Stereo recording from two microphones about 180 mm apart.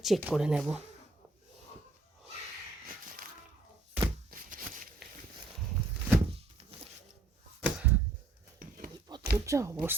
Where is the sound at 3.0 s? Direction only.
50° right (ahead or behind).